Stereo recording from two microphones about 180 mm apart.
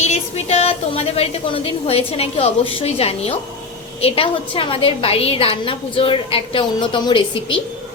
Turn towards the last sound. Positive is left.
turn(degrees=25)  # may be behind; listen again after turning